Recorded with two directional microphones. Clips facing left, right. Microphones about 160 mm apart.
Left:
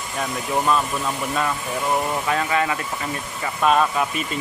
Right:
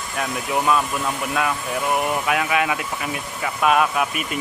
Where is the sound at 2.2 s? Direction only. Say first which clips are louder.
Right 1 dB; 10° right (ahead or behind).